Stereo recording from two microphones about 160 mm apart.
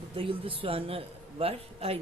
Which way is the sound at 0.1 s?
35° right (ahead or behind).